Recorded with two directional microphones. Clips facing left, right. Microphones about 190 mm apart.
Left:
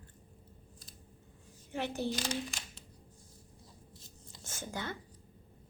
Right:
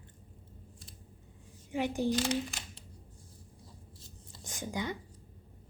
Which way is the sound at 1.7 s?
15° right (ahead or behind).